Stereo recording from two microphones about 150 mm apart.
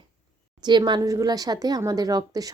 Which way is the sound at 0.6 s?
30° right (ahead or behind).